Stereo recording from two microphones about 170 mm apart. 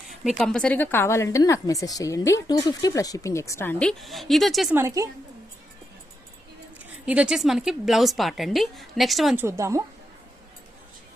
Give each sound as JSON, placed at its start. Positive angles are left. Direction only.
{"t": 0.3, "sound": "a woman's voice", "side_deg": 0}
{"t": 4.7, "sound": "a woman's voice", "side_deg": -15}
{"t": 7.0, "sound": "a woman's voice", "side_deg": -5}
{"t": 9.3, "sound": "a woman's voice", "side_deg": -15}